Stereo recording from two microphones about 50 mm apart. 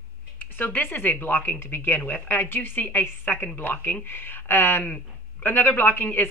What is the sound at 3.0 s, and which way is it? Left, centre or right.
A man's voice, left.